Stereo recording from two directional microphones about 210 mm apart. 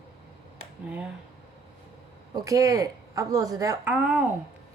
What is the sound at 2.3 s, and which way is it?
A woman's voice, 15° right (ahead or behind).